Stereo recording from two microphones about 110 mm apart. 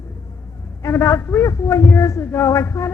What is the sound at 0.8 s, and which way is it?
Speech, 25° left (ahead or behind).